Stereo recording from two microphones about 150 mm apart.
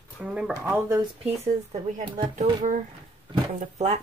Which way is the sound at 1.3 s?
45° right (ahead or behind).